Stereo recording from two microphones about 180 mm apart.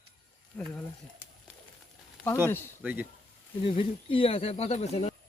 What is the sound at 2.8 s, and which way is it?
Speech, 10° right (ahead or behind).